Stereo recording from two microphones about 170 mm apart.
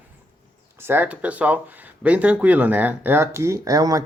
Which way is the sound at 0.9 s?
10° right (ahead or behind).